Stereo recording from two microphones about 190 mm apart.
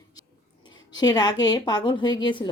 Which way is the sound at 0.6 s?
20° left (ahead or behind).